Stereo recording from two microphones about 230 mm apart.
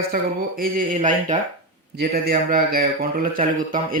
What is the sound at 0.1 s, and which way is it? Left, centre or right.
Speech, right.